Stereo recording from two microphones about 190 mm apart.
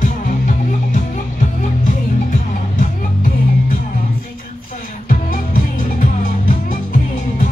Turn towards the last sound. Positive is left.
turn(degrees=45)  # may be behind; listen again after turning